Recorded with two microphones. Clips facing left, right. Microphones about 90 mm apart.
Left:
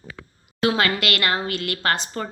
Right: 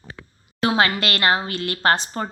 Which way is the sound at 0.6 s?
30° right (ahead or behind).